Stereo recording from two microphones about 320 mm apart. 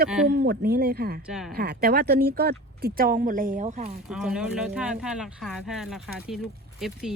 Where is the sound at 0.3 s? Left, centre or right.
Right.